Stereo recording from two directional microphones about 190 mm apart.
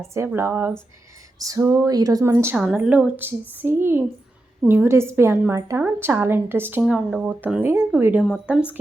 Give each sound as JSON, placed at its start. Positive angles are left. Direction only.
{"t": 0.1, "sound": "a woman's voice", "side_deg": -15}